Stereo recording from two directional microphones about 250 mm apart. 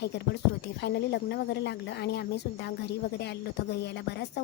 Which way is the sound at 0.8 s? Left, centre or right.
Left.